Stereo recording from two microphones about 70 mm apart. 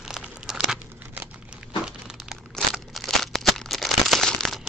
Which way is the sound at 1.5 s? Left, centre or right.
Centre.